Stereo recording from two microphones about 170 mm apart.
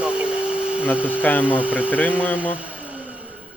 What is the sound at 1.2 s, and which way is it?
Speech, 10° left (ahead or behind).